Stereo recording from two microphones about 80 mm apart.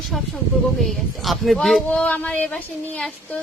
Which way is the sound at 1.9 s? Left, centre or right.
Centre.